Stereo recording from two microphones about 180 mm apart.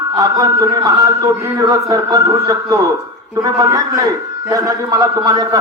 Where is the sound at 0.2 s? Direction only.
20° right (ahead or behind).